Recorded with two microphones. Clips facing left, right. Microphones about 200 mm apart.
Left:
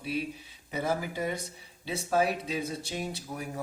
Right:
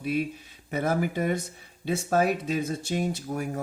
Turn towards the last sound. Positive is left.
turn(degrees=-50)  # may be behind; listen again after turning